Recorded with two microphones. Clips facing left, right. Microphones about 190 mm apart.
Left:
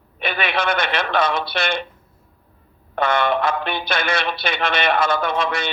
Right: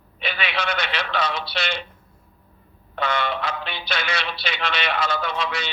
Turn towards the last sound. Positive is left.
turn(degrees=50)  # may be behind; listen again after turning